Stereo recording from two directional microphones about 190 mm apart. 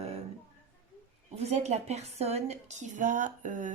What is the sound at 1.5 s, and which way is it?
A woman's voice, 35° right (ahead or behind).